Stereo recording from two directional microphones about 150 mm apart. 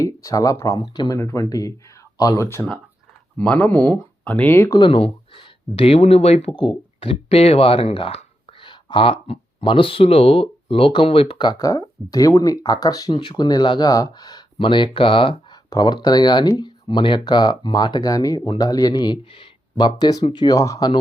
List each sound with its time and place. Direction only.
0.0 s speech: 20° left (ahead or behind)
4.8 s speech: 40° left (ahead or behind)